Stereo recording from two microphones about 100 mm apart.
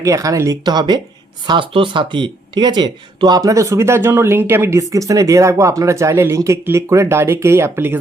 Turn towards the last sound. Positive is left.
turn(degrees=-25)  # may be behind; listen again after turning